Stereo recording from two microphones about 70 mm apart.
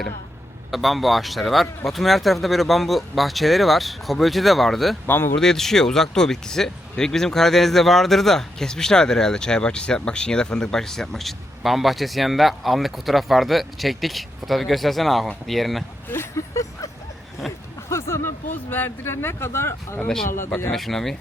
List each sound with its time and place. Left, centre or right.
0.7 s speech: centre
5.0 s speech: left
5.4 s speech: centre
16.0 s speech: left
17.5 s a sound: centre
17.8 s a sound: left
18.7 s speech: left
20.1 s speech: centre